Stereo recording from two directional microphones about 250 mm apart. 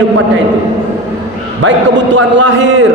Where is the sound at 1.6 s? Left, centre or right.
Right.